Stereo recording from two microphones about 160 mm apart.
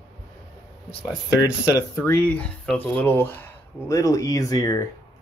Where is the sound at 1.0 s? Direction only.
20° left (ahead or behind).